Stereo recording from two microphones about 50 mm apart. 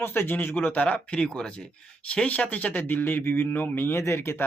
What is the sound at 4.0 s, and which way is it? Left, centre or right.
Speech, left.